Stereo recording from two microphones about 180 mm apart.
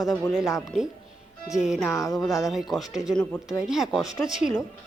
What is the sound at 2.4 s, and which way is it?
Speech, centre (ahead or behind).